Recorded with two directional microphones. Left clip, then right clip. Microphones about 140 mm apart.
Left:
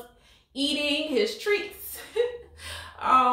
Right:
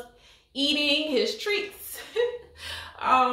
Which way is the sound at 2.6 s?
10° right (ahead or behind).